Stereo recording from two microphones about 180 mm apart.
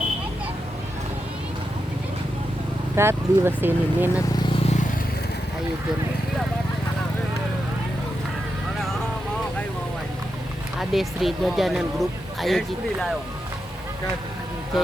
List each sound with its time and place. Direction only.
2.9 s speech: 15° right (ahead or behind)
4.6 s vehicle: 40° left (ahead or behind)
10.8 s speech: centre (ahead or behind)